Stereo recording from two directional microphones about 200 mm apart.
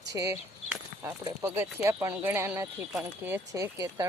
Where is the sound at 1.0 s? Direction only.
10° right (ahead or behind).